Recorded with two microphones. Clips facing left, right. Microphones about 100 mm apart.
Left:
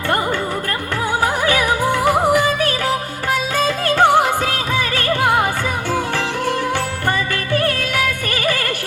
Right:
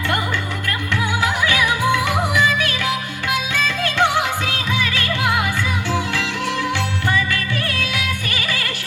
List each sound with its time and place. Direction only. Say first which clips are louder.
1.2 s music: left 3 dB; 45° left (ahead or behind)
7.1 s music: left 3 dB; 45° left (ahead or behind)